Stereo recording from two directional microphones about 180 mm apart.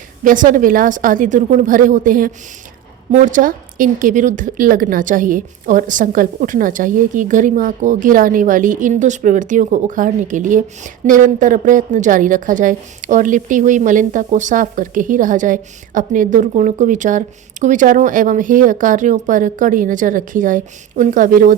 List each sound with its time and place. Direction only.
0.3 s a woman's voice: 45° right (ahead or behind)